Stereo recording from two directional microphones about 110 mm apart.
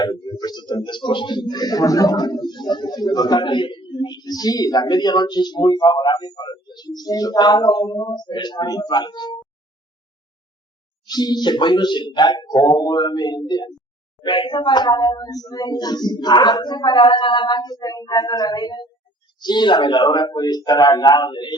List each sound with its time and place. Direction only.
0.0 s speech: 35° left (ahead or behind)
8.3 s speech: 40° left (ahead or behind)
11.0 s speech: 40° left (ahead or behind)